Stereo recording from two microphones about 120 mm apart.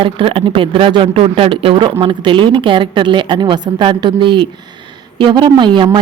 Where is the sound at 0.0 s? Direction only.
50° right (ahead or behind).